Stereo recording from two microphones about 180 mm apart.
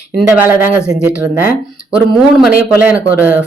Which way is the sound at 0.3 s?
10° right (ahead or behind).